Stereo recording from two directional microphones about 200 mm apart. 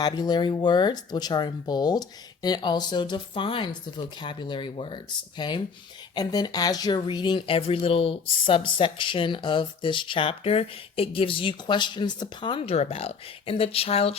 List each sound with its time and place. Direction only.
0.0 s speech: 20° left (ahead or behind)